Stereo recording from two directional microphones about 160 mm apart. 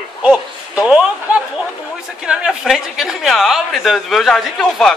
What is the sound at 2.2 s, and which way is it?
A woman's voice, 5° right (ahead or behind).